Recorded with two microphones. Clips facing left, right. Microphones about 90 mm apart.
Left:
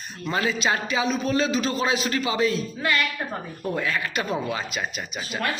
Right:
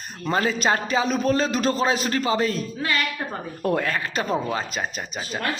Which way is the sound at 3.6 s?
50° right (ahead or behind).